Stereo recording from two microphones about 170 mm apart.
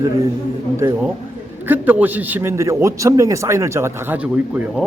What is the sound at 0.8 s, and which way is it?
A man's voice, 15° right (ahead or behind).